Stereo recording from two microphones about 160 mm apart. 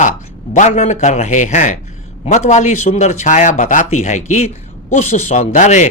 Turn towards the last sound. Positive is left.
turn(degrees=50)  # may be behind; listen again after turning